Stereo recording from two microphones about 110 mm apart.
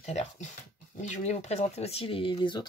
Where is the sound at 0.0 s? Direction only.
90° left.